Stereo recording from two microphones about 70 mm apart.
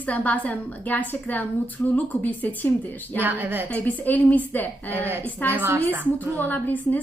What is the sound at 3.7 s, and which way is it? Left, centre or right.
A woman's voice, left.